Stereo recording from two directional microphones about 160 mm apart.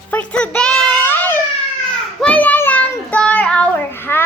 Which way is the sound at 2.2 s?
10° left (ahead or behind).